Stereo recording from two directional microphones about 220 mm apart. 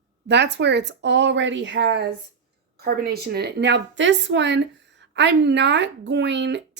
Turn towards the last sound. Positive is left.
turn(degrees=-50)  # may be behind; listen again after turning